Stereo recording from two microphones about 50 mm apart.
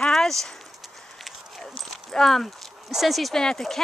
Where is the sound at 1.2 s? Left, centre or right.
Centre.